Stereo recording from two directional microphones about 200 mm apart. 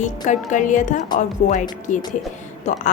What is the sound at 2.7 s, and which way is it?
Speech, 35° left (ahead or behind).